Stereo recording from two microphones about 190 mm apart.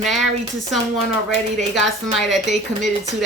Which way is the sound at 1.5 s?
Centre (ahead or behind).